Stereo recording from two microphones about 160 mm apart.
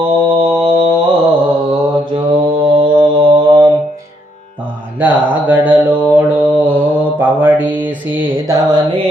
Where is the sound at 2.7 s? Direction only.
30° right (ahead or behind).